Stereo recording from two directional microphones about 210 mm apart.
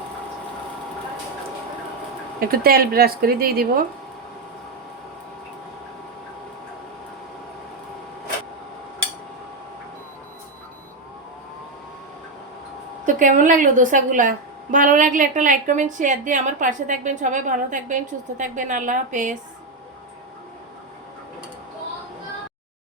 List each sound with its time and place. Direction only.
2.4 s a woman's voice: 45° right (ahead or behind)
13.1 s a woman's voice: 35° right (ahead or behind)